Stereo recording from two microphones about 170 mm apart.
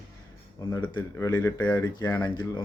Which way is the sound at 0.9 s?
20° left (ahead or behind).